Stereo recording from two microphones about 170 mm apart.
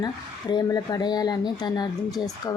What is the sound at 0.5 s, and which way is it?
A woman's voice, 25° left (ahead or behind).